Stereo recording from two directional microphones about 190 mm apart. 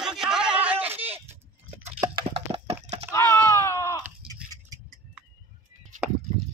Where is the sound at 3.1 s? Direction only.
15° left (ahead or behind).